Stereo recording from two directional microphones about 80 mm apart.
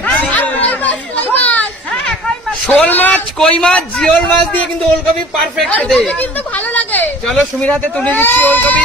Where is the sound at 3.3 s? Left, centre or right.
Centre.